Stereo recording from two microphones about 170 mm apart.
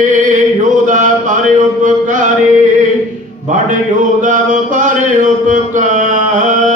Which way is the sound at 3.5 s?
50° right (ahead or behind).